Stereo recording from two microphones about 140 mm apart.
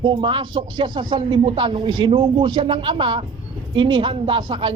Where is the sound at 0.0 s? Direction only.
35° right (ahead or behind).